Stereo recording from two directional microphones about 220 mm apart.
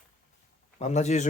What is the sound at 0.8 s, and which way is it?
Speech, 30° left (ahead or behind).